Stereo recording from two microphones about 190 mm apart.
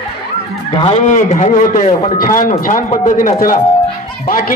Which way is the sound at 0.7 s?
35° left (ahead or behind).